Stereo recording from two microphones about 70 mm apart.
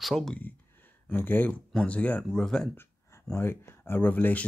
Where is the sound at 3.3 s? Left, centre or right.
Left.